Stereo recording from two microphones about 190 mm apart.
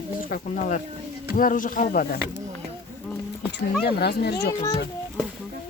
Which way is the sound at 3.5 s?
55° left (ahead or behind).